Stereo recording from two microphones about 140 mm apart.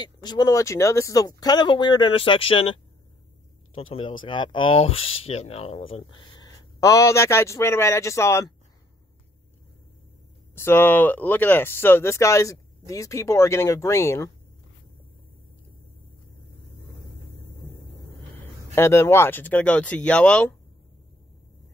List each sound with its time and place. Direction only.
0.0 s speech: 30° left (ahead or behind)
3.7 s speech: 40° left (ahead or behind); by 8.5 s 20° left (ahead or behind)
10.5 s speech: 15° left (ahead or behind)
18.8 s speech: 20° left (ahead or behind)